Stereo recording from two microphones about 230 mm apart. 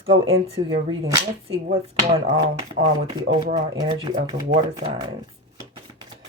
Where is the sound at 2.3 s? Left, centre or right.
Right.